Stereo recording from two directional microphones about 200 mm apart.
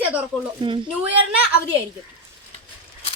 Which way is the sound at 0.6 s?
25° right (ahead or behind).